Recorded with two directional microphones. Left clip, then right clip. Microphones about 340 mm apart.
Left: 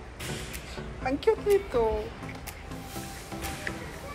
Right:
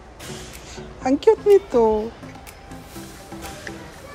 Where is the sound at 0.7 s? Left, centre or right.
Right.